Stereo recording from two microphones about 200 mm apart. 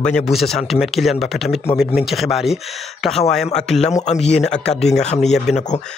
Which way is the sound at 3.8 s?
35° left (ahead or behind).